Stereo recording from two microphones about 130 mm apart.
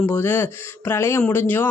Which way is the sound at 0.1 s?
15° left (ahead or behind).